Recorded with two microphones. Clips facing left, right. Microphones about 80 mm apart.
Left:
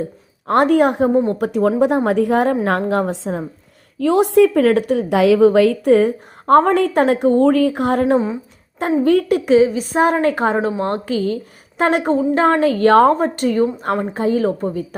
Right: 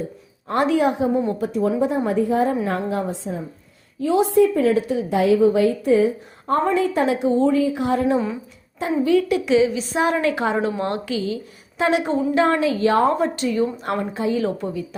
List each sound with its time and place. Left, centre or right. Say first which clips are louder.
0.4 s a woman's voice: left 5 dB; left
4.0 s a woman's voice: left 4 dB; left